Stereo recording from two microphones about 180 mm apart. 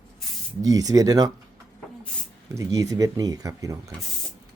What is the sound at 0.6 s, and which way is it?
Speech, 20° right (ahead or behind).